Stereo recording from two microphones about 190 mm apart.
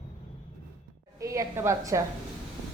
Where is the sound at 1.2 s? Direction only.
15° right (ahead or behind).